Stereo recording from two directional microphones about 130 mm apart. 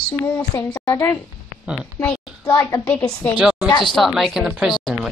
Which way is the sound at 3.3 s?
5° right (ahead or behind).